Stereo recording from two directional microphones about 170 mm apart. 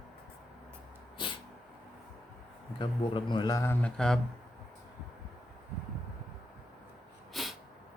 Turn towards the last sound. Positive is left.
turn(degrees=0)  # may be behind; listen again after turning